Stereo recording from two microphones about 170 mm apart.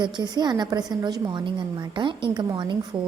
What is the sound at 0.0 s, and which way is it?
A woman's voice, 25° right (ahead or behind).